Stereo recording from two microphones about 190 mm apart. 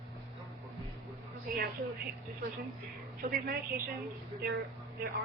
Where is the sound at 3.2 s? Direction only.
45° right (ahead or behind).